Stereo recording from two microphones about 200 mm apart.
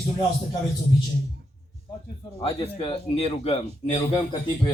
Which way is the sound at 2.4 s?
25° left (ahead or behind).